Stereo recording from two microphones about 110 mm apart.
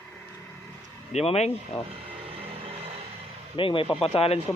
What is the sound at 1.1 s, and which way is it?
Speech, 75° left (ahead or behind).